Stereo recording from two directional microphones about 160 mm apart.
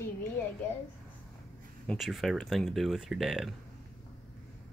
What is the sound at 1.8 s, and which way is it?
Speech, centre (ahead or behind).